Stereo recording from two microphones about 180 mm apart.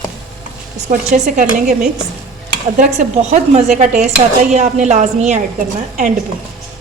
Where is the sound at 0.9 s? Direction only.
45° right (ahead or behind).